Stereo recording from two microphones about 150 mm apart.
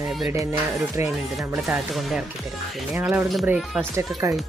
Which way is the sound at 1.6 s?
Centre (ahead or behind).